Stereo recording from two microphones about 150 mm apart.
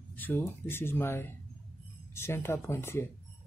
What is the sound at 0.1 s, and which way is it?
Speech, 10° left (ahead or behind).